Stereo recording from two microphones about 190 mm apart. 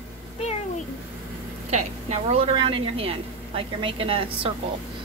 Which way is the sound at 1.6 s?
35° right (ahead or behind).